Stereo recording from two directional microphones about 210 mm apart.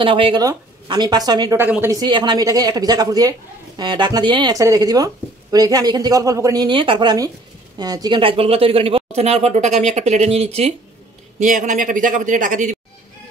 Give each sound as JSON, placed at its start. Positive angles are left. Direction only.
{"t": 0.0, "sound": "speech", "side_deg": -25}